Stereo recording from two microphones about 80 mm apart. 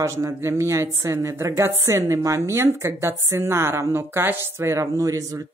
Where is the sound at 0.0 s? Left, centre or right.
Right.